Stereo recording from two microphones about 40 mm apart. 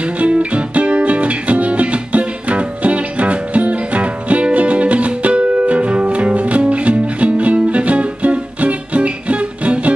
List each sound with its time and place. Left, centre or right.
0.0 s music: right